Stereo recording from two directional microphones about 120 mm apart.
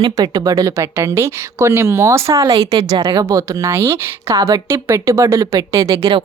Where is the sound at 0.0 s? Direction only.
30° right (ahead or behind).